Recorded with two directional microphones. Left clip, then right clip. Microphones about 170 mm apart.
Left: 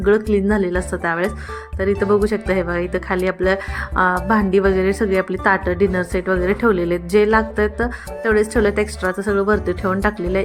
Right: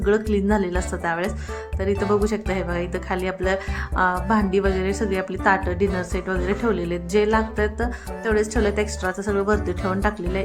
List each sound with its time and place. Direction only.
0.0 s speech: 20° left (ahead or behind)